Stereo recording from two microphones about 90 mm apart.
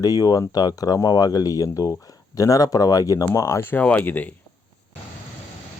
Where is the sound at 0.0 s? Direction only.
45° left (ahead or behind); by 4.3 s 20° left (ahead or behind).